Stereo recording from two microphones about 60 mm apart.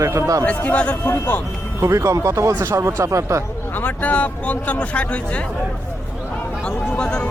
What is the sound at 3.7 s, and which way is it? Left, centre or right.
Speech, left.